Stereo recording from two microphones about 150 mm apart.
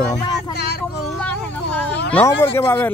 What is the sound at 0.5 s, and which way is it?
Speech, 90° left.